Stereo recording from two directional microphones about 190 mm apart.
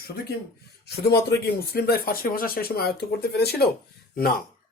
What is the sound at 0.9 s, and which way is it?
Speech, 60° left (ahead or behind).